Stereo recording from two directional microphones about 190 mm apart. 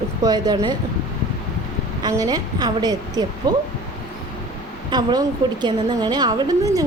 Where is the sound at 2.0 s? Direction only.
20° right (ahead or behind).